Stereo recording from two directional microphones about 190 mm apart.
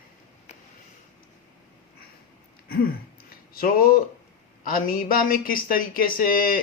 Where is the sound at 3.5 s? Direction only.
50° left (ahead or behind).